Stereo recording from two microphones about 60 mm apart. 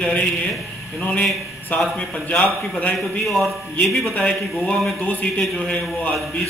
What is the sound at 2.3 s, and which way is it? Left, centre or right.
Speech, left.